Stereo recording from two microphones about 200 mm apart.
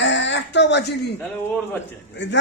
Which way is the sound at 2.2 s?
60° left (ahead or behind).